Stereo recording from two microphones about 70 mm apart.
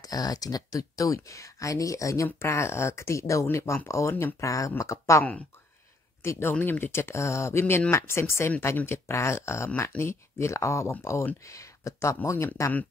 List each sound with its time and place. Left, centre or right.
0.0 s speech: left
2.3 s speech: left
6.2 s speech: left